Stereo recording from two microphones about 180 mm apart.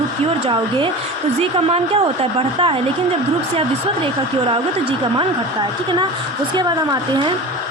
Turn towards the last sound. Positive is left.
turn(degrees=-25)  # may be behind; listen again after turning